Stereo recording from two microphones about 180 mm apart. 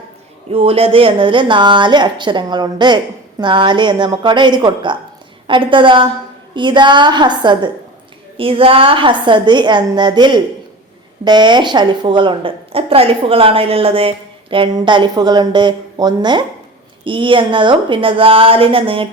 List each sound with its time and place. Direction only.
0.5 s a woman's voice: 30° right (ahead or behind)